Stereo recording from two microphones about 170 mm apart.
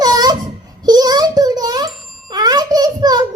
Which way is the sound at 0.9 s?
25° right (ahead or behind).